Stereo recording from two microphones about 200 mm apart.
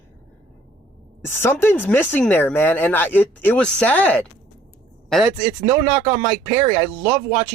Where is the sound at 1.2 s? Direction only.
10° left (ahead or behind).